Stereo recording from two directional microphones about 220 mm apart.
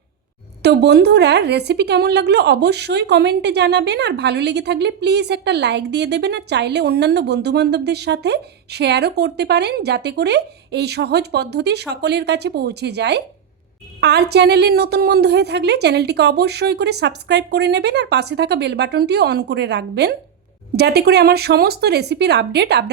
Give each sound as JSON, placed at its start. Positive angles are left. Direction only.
{"t": 0.6, "sound": "a woman's voice", "side_deg": -50}